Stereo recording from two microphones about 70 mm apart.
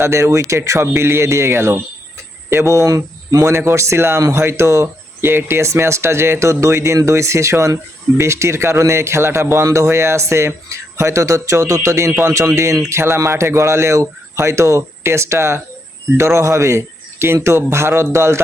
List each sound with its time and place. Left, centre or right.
0.0 s speech: right